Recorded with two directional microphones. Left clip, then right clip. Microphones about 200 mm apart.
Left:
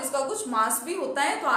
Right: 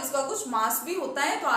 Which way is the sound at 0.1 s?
20° left (ahead or behind).